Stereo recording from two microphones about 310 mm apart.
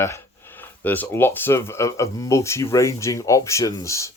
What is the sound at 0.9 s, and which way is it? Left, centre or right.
Speech, centre.